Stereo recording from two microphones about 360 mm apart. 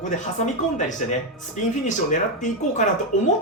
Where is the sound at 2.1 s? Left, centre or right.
Centre.